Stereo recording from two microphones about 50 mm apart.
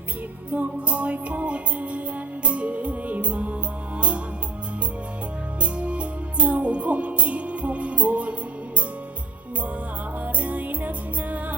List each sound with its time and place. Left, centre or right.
0.5 s music: right
5.6 s music: right
10.2 s music: right